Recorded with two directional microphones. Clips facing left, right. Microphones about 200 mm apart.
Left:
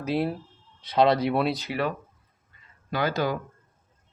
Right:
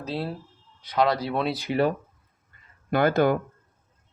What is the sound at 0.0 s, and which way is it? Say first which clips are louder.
Speech: left 4 dB; 15° left (ahead or behind).